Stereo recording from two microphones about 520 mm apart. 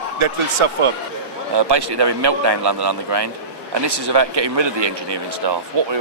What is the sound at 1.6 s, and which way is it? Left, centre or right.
Speech, right.